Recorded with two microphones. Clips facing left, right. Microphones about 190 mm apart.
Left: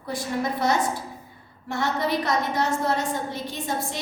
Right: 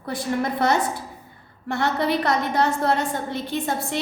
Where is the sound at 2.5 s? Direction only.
60° right (ahead or behind).